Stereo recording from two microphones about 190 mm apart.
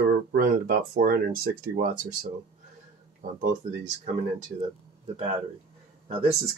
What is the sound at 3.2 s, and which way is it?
Speech, 45° right (ahead or behind).